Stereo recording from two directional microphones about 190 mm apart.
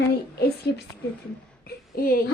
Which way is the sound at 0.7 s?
65° left (ahead or behind).